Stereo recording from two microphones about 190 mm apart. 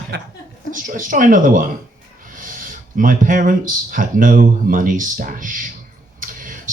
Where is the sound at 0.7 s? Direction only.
45° right (ahead or behind).